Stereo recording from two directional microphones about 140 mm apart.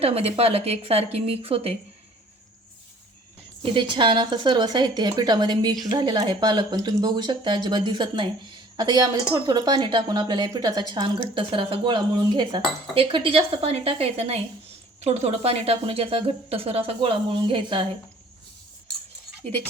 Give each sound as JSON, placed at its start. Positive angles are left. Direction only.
{"t": 0.0, "sound": "speech", "side_deg": -45}
{"t": 3.6, "sound": "a woman's voice", "side_deg": -35}